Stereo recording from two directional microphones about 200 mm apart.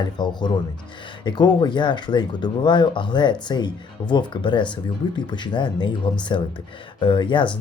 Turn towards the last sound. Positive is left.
turn(degrees=25)  # may be behind; listen again after turning